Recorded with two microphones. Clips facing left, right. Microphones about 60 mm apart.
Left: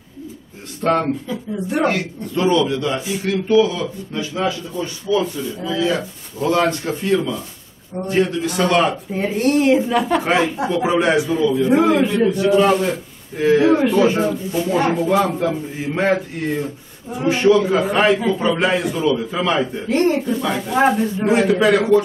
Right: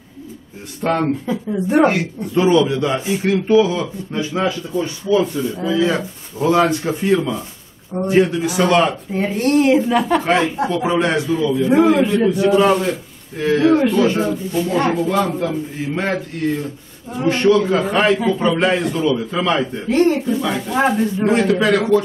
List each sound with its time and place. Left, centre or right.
0.8 s a man's voice: centre
11.4 s a man's voice: centre
13.4 s a man's voice: centre